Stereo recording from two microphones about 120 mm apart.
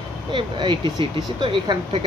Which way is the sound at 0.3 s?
45° right (ahead or behind).